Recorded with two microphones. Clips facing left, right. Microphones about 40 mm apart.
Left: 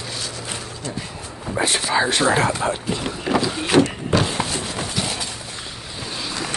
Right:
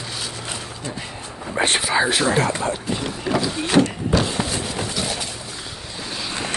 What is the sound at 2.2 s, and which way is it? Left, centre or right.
Speech, centre.